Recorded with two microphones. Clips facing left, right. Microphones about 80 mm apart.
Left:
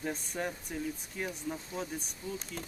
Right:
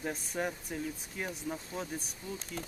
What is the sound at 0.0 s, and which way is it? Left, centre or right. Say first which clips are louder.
Speech: right 1 dB; centre.